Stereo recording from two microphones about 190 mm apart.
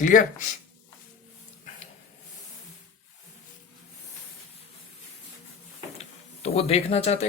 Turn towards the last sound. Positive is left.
turn(degrees=35)  # may be behind; listen again after turning